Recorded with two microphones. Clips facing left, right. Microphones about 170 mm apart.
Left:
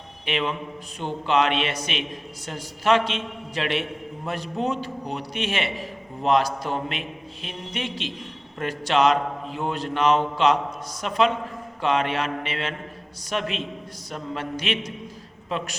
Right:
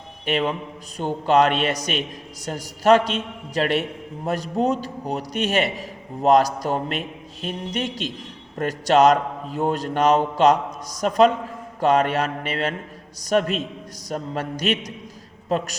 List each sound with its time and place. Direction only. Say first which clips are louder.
0.3 s a man's voice: right 4 dB; 40° right (ahead or behind)